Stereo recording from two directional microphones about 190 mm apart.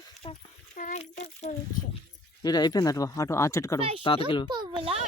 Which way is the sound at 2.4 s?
20° left (ahead or behind).